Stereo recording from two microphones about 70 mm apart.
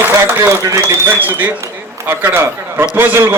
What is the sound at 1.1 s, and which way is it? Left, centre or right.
A man's voice, right.